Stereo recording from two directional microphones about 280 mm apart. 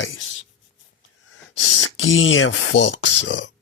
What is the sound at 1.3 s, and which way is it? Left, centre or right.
A man's voice, left.